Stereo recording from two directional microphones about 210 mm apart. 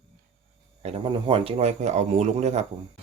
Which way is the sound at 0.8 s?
30° right (ahead or behind).